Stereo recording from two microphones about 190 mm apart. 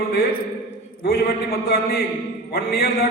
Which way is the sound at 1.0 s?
55° left (ahead or behind).